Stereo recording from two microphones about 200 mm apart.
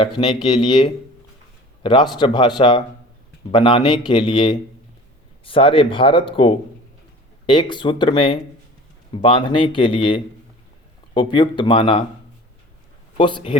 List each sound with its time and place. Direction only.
0.2 s a man's voice: 25° left (ahead or behind)
13.1 s a man's voice: 25° left (ahead or behind)